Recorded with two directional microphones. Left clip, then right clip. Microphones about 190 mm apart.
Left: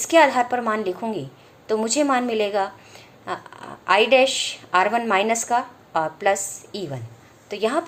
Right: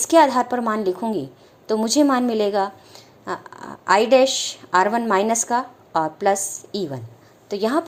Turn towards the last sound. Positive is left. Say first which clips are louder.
# right 1 dB
turn(degrees=-35)  # may be behind; listen again after turning